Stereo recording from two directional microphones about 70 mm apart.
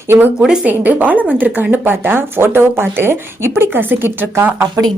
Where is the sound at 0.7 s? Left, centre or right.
Right.